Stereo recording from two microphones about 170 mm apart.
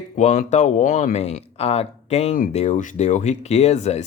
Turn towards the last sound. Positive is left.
turn(degrees=40)  # may be behind; listen again after turning